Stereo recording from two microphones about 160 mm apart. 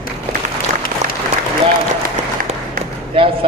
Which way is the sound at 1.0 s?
45° right (ahead or behind).